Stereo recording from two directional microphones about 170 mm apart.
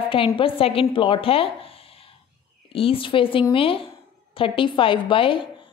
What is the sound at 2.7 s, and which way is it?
A woman's voice, 30° left (ahead or behind).